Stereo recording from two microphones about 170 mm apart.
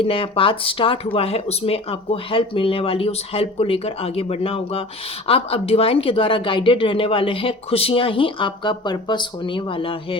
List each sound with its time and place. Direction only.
0.0 s speech: 35° left (ahead or behind)